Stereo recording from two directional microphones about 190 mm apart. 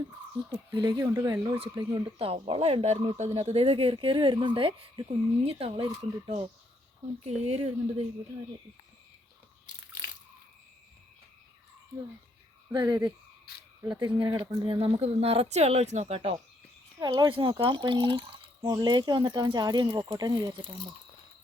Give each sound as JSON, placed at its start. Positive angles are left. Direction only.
{"t": 0.5, "sound": "speech", "side_deg": -20}
{"t": 9.6, "sound": "biting", "side_deg": 45}
{"t": 12.7, "sound": "speech", "side_deg": -20}
{"t": 17.0, "sound": "speech", "side_deg": -25}